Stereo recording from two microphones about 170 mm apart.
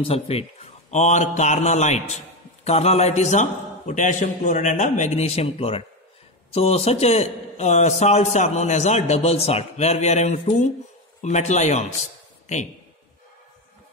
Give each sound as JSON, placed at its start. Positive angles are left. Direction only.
{"t": 0.0, "sound": "a man's voice", "side_deg": 35}